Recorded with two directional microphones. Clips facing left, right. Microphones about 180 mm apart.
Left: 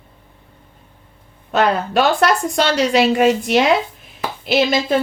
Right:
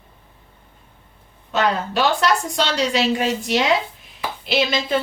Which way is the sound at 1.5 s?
60° left (ahead or behind).